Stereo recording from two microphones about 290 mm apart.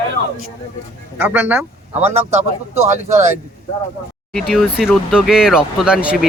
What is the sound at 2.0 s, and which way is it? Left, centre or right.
A man's voice, right.